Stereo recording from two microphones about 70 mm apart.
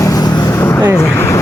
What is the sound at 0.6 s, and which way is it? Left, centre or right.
Vehicle, left.